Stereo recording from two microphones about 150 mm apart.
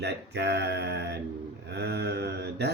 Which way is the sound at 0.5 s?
90° right.